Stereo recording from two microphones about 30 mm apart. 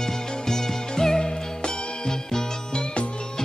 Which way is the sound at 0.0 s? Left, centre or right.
Centre.